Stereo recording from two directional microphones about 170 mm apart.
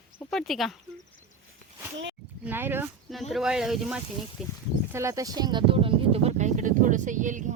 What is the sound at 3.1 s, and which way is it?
Speech, centre (ahead or behind).